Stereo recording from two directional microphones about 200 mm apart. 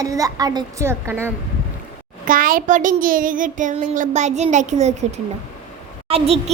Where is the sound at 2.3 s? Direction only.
45° right (ahead or behind).